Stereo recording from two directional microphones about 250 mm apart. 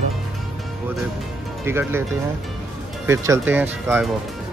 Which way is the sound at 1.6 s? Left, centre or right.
Centre.